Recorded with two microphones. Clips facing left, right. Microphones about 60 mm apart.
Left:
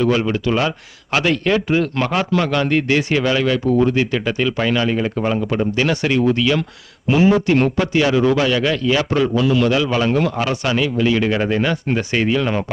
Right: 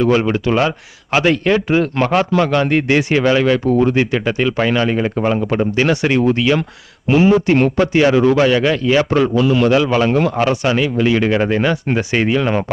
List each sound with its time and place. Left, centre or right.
0.0 s a man's voice: right
6.1 s a man's voice: right
7.9 s a man's voice: right
10.5 s speech: centre